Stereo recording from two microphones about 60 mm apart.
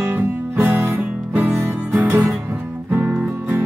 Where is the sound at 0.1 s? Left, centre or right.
Right.